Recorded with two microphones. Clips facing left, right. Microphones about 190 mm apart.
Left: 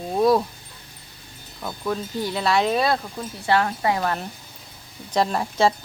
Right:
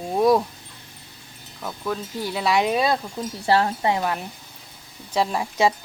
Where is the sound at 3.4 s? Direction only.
30° right (ahead or behind).